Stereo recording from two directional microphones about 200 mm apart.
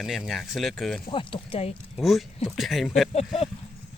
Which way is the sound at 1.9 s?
Centre (ahead or behind).